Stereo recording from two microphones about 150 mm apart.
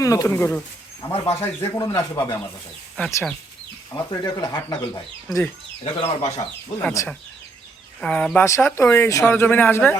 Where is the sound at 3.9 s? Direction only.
25° left (ahead or behind).